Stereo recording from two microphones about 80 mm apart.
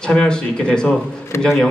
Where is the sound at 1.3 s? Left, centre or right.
Left.